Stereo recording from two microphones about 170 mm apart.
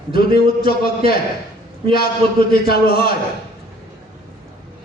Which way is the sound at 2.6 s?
65° left (ahead or behind).